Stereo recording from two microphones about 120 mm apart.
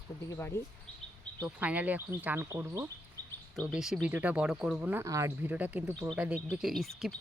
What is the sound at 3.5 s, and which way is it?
Speech, 5° right (ahead or behind).